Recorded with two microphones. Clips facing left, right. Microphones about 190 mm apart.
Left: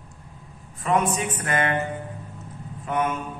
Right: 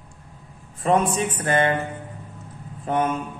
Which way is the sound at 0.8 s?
30° right (ahead or behind).